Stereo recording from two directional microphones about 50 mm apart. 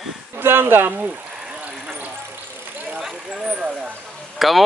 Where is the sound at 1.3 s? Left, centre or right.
Right.